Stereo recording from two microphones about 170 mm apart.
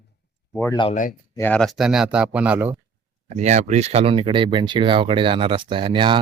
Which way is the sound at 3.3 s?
40° right (ahead or behind).